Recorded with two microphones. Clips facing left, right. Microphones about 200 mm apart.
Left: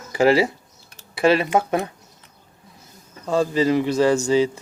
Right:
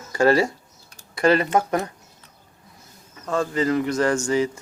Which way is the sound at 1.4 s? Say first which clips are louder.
Left 1 dB; 15° left (ahead or behind).